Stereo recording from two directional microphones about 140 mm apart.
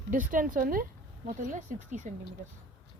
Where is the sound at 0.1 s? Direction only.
70° right (ahead or behind); by 0.9 s 90° right.